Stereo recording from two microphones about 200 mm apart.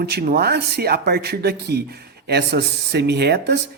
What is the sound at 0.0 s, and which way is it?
Speech, 55° right (ahead or behind).